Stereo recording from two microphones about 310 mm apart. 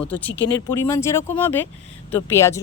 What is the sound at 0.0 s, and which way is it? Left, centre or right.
Speech, centre.